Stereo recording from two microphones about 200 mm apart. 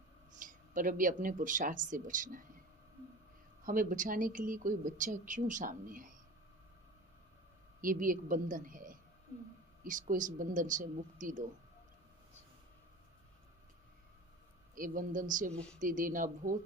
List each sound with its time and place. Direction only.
0.3 s speech: 40° right (ahead or behind)
3.6 s speech: 45° right (ahead or behind)
7.8 s a woman's voice: 45° right (ahead or behind)
14.8 s speech: 45° right (ahead or behind)
15.5 s speech: 5° left (ahead or behind)
15.8 s a woman's voice: 40° right (ahead or behind)